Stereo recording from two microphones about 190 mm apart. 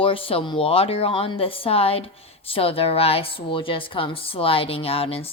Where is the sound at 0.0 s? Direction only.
30° left (ahead or behind).